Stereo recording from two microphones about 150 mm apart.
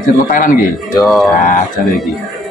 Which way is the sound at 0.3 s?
70° left (ahead or behind).